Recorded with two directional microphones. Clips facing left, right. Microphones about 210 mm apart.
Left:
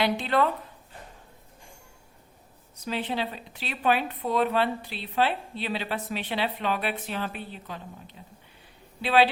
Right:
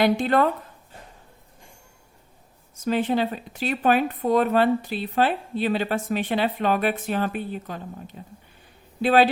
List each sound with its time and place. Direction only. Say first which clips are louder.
0.0 s a woman's voice: right 5 dB; 45° right (ahead or behind)
2.8 s a woman's voice: right 8 dB; 45° right (ahead or behind)